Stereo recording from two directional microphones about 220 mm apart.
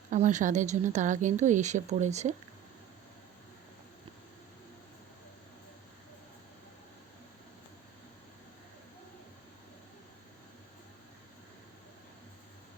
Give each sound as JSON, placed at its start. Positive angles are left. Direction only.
{"t": 0.1, "sound": "speech", "side_deg": -35}